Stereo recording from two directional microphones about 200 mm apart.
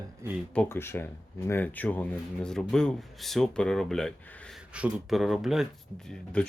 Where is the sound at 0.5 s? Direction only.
10° left (ahead or behind).